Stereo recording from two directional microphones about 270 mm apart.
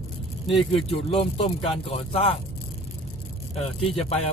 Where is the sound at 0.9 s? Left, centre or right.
Left.